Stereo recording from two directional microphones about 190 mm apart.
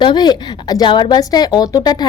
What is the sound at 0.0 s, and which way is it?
A woman's voice, 20° left (ahead or behind).